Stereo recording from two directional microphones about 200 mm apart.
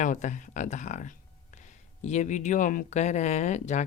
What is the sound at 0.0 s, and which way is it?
Speech, 40° left (ahead or behind).